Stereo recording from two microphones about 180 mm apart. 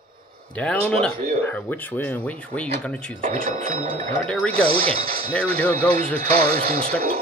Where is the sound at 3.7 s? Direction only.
35° right (ahead or behind).